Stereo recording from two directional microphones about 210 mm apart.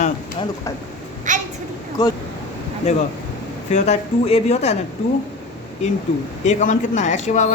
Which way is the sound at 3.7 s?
30° left (ahead or behind).